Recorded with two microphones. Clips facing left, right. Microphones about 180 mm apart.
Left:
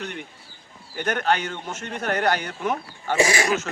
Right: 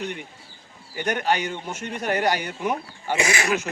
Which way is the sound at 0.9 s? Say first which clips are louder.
Even; 10° right (ahead or behind).